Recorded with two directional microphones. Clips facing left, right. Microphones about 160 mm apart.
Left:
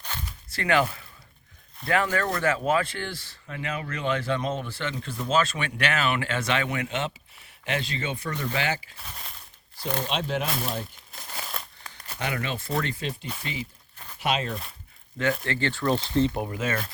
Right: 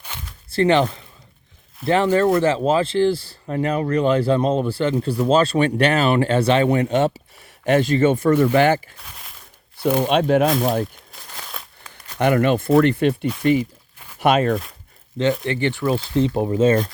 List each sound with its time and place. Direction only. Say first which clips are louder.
0.5 s speech: right 8 dB; 30° right (ahead or behind)
1.8 s speech: right 7 dB; 5° right (ahead or behind)
2.1 s speech: right 9 dB; 30° right (ahead or behind); by 8.9 s 55° right (ahead or behind)
9.0 s a sound: even; centre (ahead or behind)
10.1 s speech: right 13 dB; 55° right (ahead or behind)
11.1 s crumpling: even; 5° left (ahead or behind)
12.2 s speech: right 14 dB; 55° right (ahead or behind)
15.4 s speech: right 5 dB; 15° right (ahead or behind)